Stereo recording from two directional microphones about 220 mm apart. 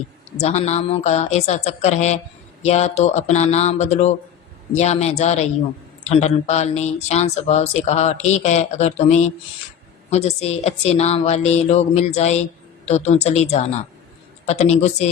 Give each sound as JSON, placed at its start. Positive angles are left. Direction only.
{"t": 0.3, "sound": "a woman's voice", "side_deg": 30}